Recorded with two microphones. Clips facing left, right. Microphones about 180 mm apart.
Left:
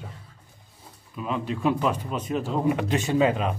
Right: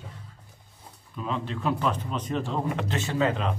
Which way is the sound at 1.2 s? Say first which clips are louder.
Left 3 dB; 10° left (ahead or behind).